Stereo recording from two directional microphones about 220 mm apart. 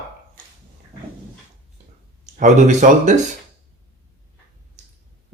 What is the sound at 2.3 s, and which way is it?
Speech, 35° right (ahead or behind).